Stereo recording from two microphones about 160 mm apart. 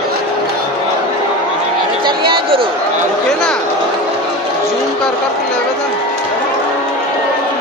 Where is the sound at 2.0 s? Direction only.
30° right (ahead or behind).